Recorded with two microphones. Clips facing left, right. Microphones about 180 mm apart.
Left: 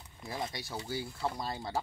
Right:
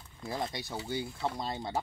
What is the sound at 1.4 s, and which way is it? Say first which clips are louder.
Speech: right 2 dB; 20° right (ahead or behind).